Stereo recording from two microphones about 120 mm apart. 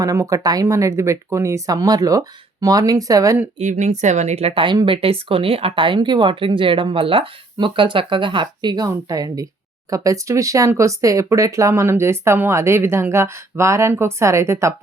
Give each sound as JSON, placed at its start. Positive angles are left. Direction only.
{"t": 0.0, "sound": "speech", "side_deg": -25}
{"t": 3.6, "sound": "a woman's voice", "side_deg": -85}